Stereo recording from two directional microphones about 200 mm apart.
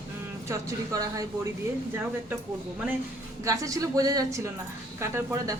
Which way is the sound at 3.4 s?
15° right (ahead or behind).